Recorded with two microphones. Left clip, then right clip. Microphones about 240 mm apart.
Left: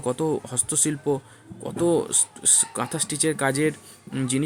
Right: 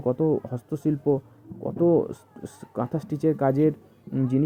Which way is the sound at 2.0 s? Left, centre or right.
Centre.